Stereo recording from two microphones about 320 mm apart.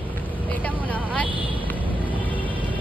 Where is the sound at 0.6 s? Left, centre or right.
Centre.